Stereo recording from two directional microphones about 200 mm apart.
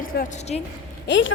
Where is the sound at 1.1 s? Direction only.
70° left (ahead or behind).